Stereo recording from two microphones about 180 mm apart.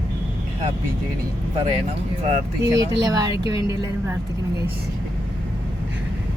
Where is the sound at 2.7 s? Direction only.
20° right (ahead or behind).